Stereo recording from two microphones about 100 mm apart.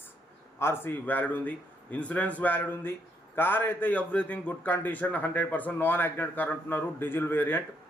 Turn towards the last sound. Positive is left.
turn(degrees=20)  # may be behind; listen again after turning